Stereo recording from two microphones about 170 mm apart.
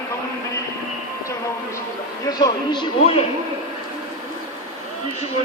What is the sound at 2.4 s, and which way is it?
Speech, 30° left (ahead or behind).